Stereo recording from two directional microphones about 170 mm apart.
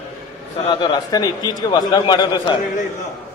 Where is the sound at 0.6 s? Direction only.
25° left (ahead or behind).